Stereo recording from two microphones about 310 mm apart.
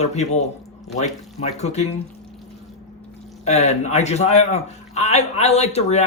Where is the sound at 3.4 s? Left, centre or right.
Left.